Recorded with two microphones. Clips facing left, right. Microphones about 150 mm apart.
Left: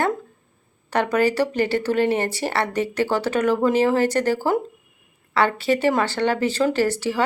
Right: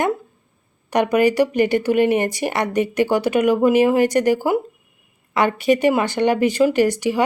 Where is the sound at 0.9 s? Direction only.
15° right (ahead or behind).